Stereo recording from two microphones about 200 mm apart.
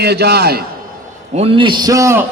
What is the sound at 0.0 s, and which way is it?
Speech, 55° right (ahead or behind).